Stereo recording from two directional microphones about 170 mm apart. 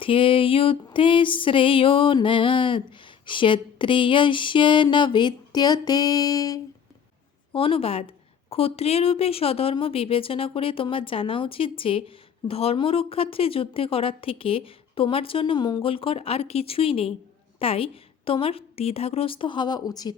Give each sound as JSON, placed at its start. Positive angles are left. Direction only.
{"t": 0.0, "sound": "music", "side_deg": 30}
{"t": 7.5, "sound": "a woman's voice", "side_deg": 35}